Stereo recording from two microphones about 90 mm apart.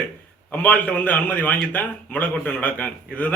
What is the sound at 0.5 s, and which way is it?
A man's voice, 20° left (ahead or behind).